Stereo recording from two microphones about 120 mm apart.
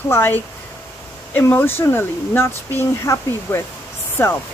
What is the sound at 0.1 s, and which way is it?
Speech, 20° left (ahead or behind).